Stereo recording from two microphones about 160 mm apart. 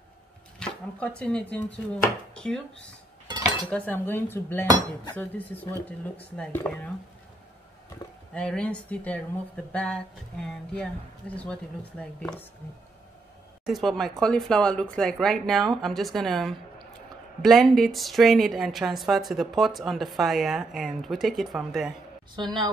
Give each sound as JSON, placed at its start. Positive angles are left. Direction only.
{"t": 0.6, "sound": "speech", "side_deg": 5}
{"t": 3.7, "sound": "speech", "side_deg": 10}
{"t": 8.4, "sound": "speech", "side_deg": 5}
{"t": 13.7, "sound": "a woman's voice", "side_deg": 0}
{"t": 22.3, "sound": "a woman's voice", "side_deg": -30}